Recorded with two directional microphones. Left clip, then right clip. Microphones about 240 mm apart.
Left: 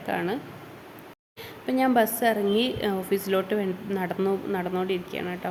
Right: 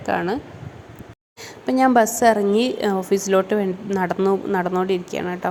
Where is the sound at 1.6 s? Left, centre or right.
Centre.